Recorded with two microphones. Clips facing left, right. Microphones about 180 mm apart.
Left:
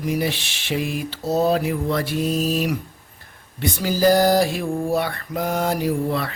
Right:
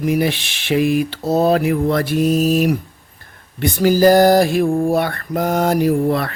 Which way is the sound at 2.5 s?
55° right (ahead or behind).